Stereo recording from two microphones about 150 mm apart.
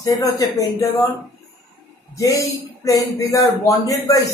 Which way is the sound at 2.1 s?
20° left (ahead or behind).